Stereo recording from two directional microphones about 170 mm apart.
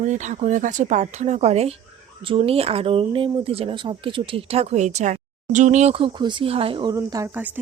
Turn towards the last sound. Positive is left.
turn(degrees=-15)  # may be behind; listen again after turning